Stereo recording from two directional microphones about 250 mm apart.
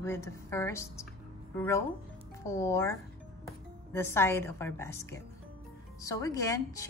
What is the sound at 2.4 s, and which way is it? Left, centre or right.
Speech, centre.